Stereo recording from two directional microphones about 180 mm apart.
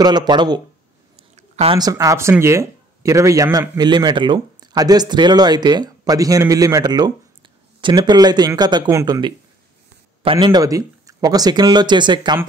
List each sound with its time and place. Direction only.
0.0 s speech: 25° right (ahead or behind)
1.3 s a sound: 35° right (ahead or behind)
1.8 s speech: 20° right (ahead or behind)